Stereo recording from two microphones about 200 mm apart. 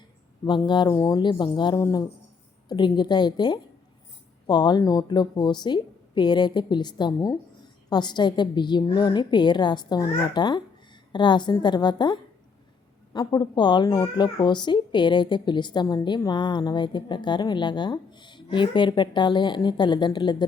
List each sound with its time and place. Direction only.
0.4 s speech: 20° left (ahead or behind)